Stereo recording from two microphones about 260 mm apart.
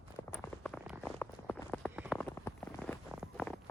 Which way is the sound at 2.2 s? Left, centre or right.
Centre.